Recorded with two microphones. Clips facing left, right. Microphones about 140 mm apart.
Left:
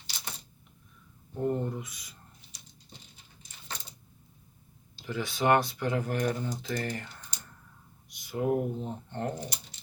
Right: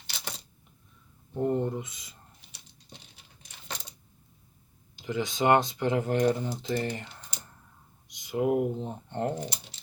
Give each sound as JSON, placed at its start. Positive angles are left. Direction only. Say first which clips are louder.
{"t": 1.3, "sound": "speech", "louder": "right 3 dB", "side_deg": -20}
{"t": 4.9, "sound": "speech", "louder": "right 3 dB", "side_deg": -20}